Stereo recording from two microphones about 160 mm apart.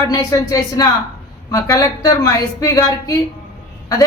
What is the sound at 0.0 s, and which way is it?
A woman's voice, 25° left (ahead or behind).